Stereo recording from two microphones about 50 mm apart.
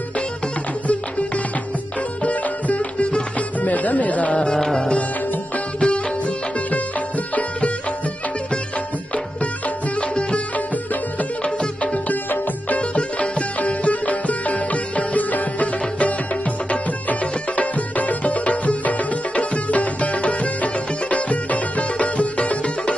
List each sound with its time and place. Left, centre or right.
2.2 s music: left
3.6 s speech: left
4.6 s music: centre
9.9 s music: left
11.4 s music: left
17.1 s music: left